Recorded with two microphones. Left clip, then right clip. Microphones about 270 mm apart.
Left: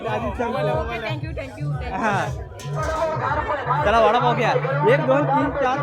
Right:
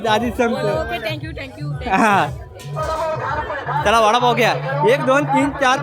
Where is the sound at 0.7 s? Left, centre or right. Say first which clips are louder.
Right 3 dB; right.